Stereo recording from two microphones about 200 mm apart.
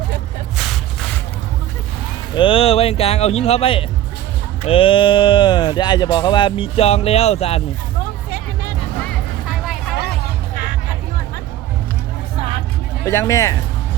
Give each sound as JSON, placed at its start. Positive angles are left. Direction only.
{"t": 2.3, "sound": "speech", "side_deg": 25}
{"t": 13.1, "sound": "speech", "side_deg": 15}